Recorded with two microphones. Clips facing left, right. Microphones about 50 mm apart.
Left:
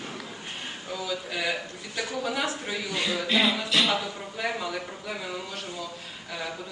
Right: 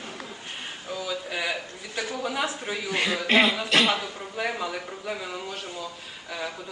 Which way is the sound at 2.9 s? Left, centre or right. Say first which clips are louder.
Right 4 dB; right.